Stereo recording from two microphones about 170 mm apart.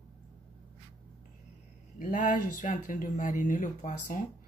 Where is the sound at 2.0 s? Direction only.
50° left (ahead or behind).